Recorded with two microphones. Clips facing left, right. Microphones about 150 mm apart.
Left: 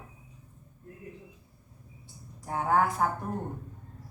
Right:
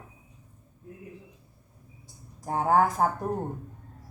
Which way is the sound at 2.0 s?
40° right (ahead or behind).